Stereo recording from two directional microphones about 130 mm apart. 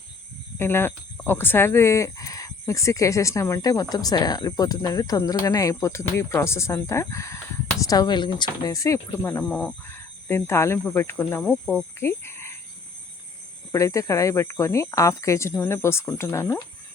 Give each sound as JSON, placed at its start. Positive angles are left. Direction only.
{"t": 0.6, "sound": "speech", "side_deg": 20}
{"t": 9.4, "sound": "speech", "side_deg": 10}
{"t": 13.7, "sound": "speech", "side_deg": 25}